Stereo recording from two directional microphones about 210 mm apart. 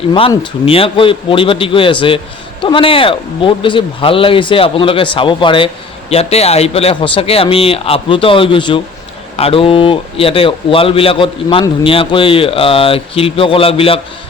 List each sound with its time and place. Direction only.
0.1 s a man's voice: 25° left (ahead or behind)